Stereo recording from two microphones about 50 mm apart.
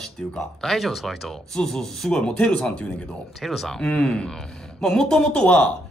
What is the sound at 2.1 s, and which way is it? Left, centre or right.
Speech, centre.